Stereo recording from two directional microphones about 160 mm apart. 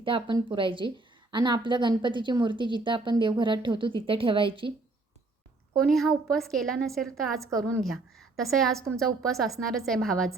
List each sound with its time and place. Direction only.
0.0 s a woman's voice: 30° right (ahead or behind)
5.8 s a woman's voice: centre (ahead or behind)